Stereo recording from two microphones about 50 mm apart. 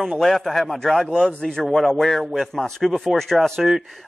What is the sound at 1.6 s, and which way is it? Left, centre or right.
A man's voice, centre.